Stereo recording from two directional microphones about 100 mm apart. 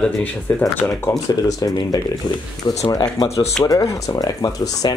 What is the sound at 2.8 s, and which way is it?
Speech, 45° left (ahead or behind).